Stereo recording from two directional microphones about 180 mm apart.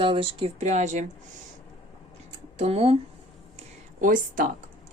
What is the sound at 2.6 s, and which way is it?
Speech, 35° right (ahead or behind).